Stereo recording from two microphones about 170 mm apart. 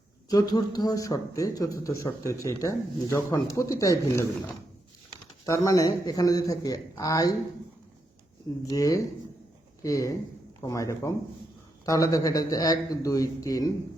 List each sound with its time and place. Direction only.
0.3 s speech: 25° left (ahead or behind)
8.6 s speech: 20° left (ahead or behind)